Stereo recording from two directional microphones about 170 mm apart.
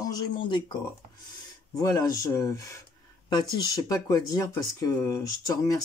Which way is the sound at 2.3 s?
20° left (ahead or behind).